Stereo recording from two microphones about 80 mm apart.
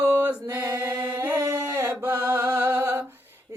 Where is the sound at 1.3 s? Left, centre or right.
Right.